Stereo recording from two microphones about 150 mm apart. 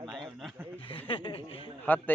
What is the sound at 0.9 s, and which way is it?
Speech, 35° left (ahead or behind).